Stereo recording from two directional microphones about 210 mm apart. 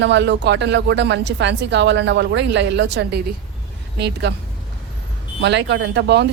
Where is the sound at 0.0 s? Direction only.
55° right (ahead or behind).